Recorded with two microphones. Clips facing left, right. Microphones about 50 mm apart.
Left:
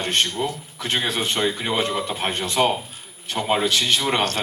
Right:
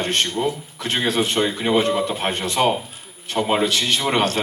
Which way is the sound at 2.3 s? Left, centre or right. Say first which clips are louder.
Right 1 dB; right.